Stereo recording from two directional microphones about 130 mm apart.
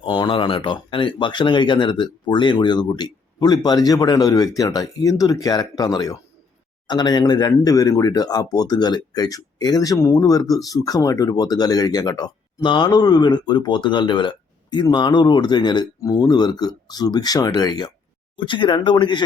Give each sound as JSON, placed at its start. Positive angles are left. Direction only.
{"t": 0.0, "sound": "speech", "side_deg": 35}